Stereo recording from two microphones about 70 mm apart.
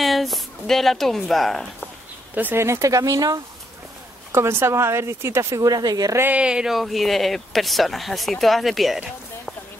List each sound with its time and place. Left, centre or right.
0.0 s a woman's voice: centre
2.3 s speech: right
2.6 s speech: right
4.3 s a woman's voice: right
5.7 s a woman's voice: right
6.3 s speech: centre